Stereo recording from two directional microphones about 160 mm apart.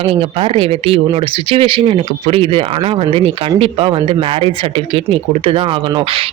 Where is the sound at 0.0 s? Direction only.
35° right (ahead or behind).